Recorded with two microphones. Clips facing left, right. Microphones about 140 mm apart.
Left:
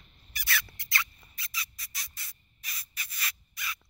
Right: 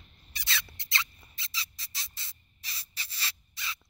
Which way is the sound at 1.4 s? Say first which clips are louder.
Left 1 dB; 30° right (ahead or behind).